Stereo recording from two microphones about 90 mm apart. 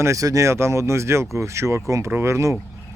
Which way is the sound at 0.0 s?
35° right (ahead or behind).